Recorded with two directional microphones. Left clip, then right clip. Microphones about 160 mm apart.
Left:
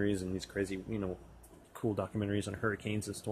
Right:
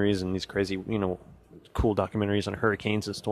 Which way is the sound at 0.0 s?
45° right (ahead or behind).